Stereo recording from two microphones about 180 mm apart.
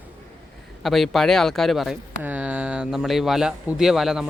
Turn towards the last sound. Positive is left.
turn(degrees=0)  # may be behind; listen again after turning